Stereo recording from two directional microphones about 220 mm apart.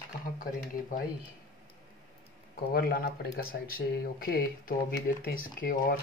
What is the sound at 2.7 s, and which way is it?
Speech, 45° left (ahead or behind).